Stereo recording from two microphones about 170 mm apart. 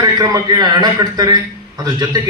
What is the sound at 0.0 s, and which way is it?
A man's voice, 20° right (ahead or behind).